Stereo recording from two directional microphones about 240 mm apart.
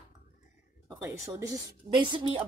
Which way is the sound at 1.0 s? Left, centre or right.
Centre.